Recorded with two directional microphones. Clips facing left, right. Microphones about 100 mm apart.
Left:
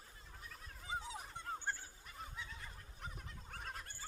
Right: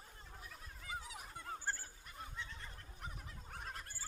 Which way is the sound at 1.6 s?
Centre (ahead or behind).